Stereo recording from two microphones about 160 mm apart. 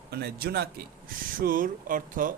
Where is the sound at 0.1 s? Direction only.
80° right.